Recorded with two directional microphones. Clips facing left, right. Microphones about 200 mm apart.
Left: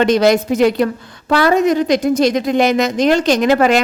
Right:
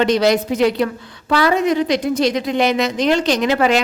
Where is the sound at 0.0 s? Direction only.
50° left (ahead or behind).